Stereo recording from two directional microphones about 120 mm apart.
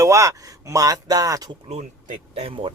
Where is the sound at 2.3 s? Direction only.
55° right (ahead or behind).